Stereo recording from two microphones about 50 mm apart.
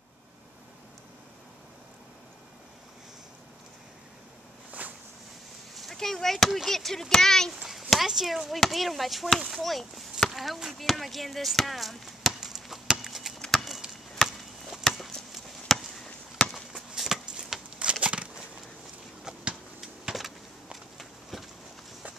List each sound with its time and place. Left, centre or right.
4.7 s walk: right
5.8 s a child's voice: centre
7.9 s speech: centre
10.3 s chop: centre
13.0 s a sound: centre
13.5 s chop: centre
14.7 s a sound: centre
15.3 s chop: centre
16.5 s a sound: centre; by 18.3 s right
19.8 s power windows: centre
21.0 s run: centre